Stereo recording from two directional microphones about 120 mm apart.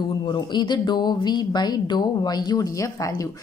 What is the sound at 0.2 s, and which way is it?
A woman's voice, 40° left (ahead or behind).